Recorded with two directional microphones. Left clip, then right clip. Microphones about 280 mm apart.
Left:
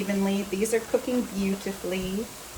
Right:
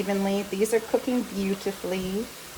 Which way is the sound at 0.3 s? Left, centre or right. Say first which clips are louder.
Right 2 dB; right.